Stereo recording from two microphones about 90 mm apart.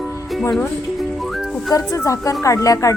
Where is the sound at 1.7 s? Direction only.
35° left (ahead or behind).